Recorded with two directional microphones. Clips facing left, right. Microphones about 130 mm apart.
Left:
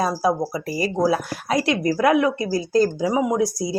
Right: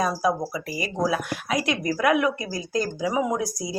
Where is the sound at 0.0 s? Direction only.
30° left (ahead or behind).